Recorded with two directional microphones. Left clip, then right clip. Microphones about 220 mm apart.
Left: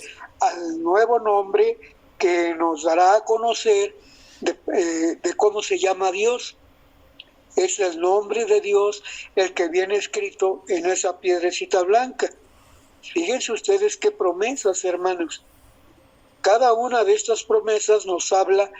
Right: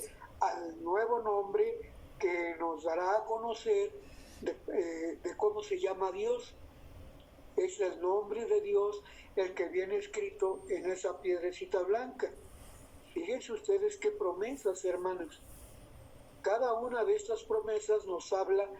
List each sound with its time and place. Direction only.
0.3 s a woman's voice: 40° left (ahead or behind)
7.5 s speech: 45° left (ahead or behind)
16.5 s speech: 45° left (ahead or behind)